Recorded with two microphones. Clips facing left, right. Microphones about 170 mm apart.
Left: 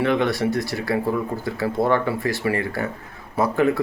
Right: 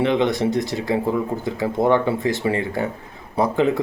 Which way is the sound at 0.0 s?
20° right (ahead or behind).